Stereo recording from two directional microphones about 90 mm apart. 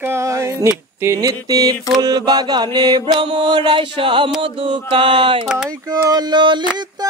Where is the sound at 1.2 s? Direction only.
45° right (ahead or behind); by 4.3 s 75° right (ahead or behind).